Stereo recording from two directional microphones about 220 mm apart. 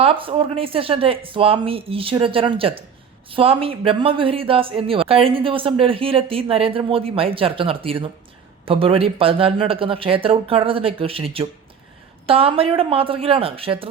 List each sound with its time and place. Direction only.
0.0 s speech: 25° right (ahead or behind)